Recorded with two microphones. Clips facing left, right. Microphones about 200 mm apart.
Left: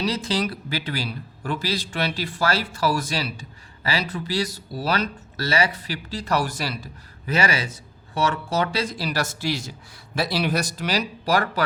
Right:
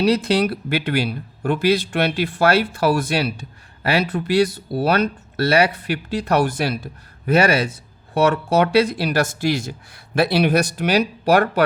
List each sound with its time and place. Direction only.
0.0 s speech: 65° right (ahead or behind)